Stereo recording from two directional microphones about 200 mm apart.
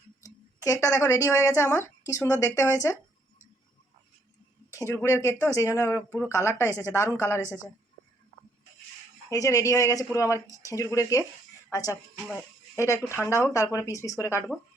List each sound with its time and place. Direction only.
0.2 s a woman's voice: 15° left (ahead or behind)
4.9 s speech: 15° left (ahead or behind)
9.3 s speech: 15° left (ahead or behind)
12.1 s speech: 5° left (ahead or behind)